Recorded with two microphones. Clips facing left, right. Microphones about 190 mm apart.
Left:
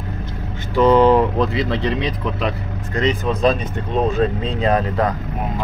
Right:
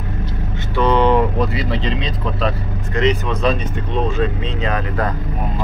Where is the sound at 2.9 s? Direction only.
35° left (ahead or behind).